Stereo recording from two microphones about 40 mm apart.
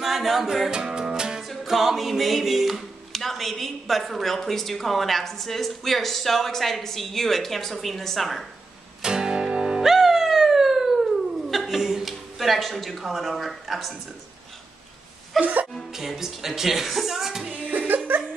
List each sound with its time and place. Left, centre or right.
0.0 s music: centre
1.4 s music: centre
1.7 s speech: centre
9.0 s guitar: centre
9.8 s music: centre
13.0 s speech: centre
15.4 s speech: right
15.9 s speech: centre
17.6 s music: right